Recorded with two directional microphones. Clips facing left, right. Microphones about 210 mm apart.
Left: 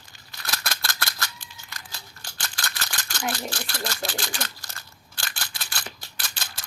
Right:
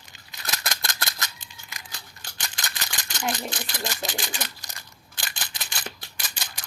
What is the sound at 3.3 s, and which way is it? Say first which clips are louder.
Speech: right 1 dB; 20° right (ahead or behind).